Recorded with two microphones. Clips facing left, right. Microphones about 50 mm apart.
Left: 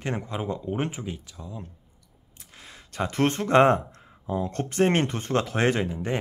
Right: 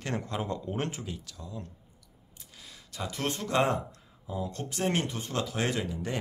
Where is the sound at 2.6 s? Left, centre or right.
Left.